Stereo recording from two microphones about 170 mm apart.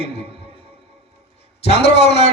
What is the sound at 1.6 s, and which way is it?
Speech, 80° left.